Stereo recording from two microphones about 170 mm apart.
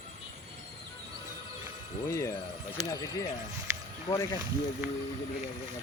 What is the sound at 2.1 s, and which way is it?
Speech, 20° left (ahead or behind).